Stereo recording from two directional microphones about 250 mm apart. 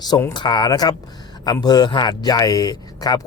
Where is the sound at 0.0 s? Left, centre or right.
Centre.